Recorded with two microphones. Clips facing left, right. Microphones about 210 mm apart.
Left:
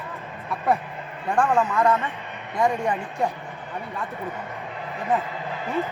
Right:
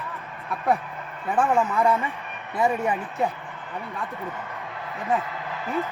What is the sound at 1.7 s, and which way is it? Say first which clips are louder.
A man's voice: left 1 dB; 10° right (ahead or behind).